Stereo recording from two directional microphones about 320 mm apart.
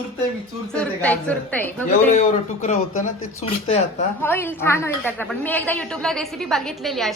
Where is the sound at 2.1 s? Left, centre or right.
Left.